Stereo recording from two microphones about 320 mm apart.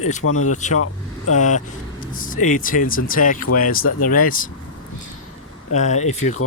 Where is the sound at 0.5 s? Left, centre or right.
Left.